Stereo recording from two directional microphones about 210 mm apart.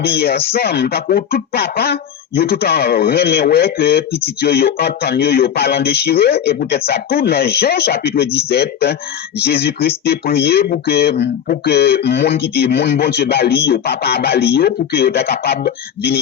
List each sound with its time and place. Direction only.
0.0 s speech: 50° left (ahead or behind)